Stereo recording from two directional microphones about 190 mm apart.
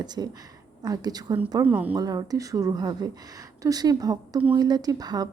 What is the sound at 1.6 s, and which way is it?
Speech, 10° right (ahead or behind).